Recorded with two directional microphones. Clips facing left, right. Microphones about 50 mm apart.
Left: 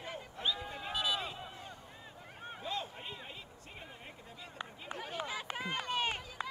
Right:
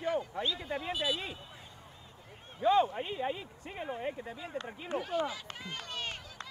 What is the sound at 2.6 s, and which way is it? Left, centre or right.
Speech, right.